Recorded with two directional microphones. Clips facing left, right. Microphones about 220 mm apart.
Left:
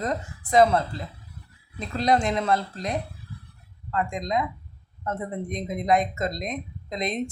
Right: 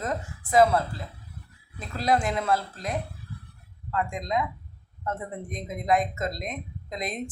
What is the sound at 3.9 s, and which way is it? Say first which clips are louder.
Speech: left 2 dB; 5° right (ahead or behind).